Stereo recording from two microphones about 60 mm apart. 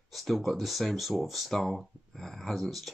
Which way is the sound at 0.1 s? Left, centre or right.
Centre.